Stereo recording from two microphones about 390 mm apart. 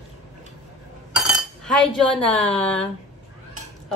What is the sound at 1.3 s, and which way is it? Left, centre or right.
Speech, centre.